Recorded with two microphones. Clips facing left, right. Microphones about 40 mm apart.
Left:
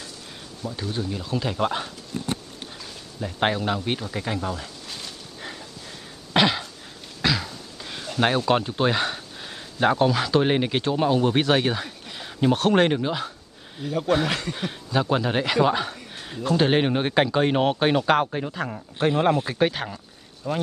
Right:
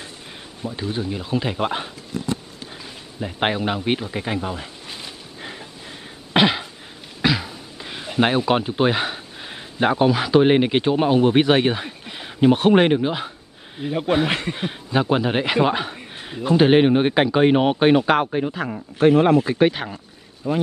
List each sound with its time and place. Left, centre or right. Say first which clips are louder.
0.6 s speech: right 3 dB; right
2.8 s a sound: right 3 dB; right
6.3 s throat clearing: right 3 dB; centre
7.2 s speech: right 3 dB; centre
18.9 s speech: right 7 dB; right
19.5 s speech: right 5 dB; centre